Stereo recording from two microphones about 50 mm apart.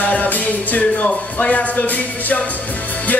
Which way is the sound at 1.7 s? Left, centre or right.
Left.